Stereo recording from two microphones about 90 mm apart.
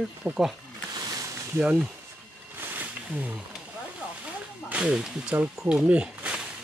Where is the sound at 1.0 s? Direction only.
45° right (ahead or behind).